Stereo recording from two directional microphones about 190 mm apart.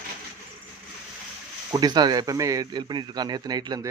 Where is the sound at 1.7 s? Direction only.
20° right (ahead or behind).